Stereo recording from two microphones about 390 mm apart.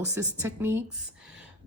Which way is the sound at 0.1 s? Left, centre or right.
Centre.